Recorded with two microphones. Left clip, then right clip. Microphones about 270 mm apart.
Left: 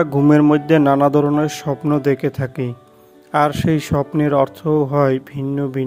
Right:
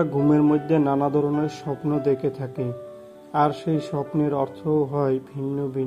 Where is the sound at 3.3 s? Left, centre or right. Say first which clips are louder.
Left 5 dB; left.